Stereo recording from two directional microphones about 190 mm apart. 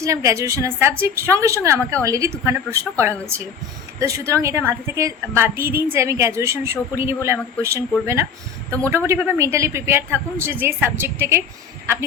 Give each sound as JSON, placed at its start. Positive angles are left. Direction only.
{"t": 0.0, "sound": "a woman's voice", "side_deg": -15}